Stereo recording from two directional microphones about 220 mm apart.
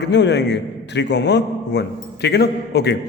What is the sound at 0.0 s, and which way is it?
A man's voice, 50° left (ahead or behind).